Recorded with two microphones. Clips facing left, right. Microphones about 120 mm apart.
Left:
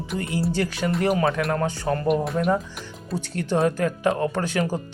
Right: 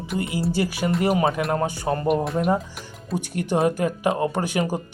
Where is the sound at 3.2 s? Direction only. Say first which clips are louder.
Even; 15° right (ahead or behind).